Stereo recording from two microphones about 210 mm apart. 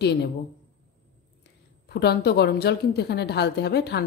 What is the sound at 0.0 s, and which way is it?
Speech, 50° left (ahead or behind).